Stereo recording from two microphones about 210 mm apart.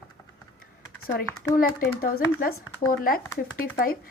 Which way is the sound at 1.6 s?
40° left (ahead or behind).